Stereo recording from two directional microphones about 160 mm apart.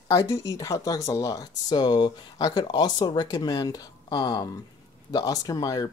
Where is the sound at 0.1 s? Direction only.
20° left (ahead or behind).